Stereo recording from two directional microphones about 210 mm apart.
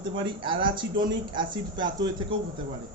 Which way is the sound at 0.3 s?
25° right (ahead or behind).